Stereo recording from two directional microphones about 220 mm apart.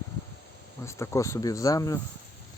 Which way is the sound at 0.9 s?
15° left (ahead or behind).